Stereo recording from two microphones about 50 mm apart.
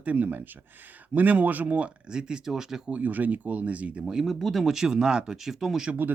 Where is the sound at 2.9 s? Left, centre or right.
Right.